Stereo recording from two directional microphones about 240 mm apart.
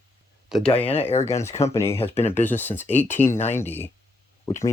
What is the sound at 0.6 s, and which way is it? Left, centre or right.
Speech, left.